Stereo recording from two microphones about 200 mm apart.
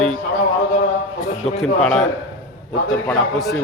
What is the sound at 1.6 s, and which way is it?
Speech, 5° left (ahead or behind).